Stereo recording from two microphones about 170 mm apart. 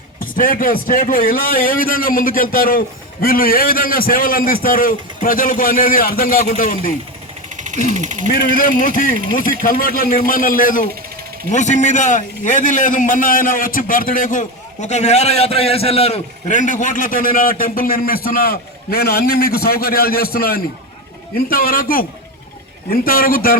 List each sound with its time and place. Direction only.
0.2 s a man's voice: 55° left (ahead or behind)
7.5 s a sound: 45° right (ahead or behind)
7.9 s speech: 45° right (ahead or behind)
8.3 s a man's voice: 55° left (ahead or behind)